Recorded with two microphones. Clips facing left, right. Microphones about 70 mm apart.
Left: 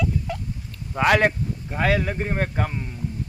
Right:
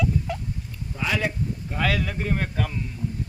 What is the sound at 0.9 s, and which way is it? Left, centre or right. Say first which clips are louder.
Speech: left 8 dB; left.